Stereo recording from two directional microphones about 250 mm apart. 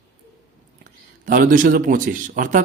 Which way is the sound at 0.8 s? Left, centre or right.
Right.